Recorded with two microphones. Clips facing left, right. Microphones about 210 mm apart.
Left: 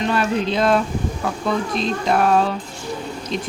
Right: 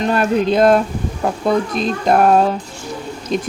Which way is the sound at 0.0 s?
45° right (ahead or behind).